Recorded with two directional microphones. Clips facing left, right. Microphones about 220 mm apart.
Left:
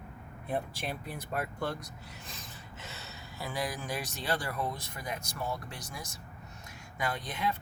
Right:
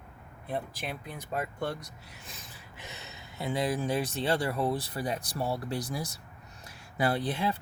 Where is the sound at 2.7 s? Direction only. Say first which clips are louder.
Right 2 dB; 15° right (ahead or behind).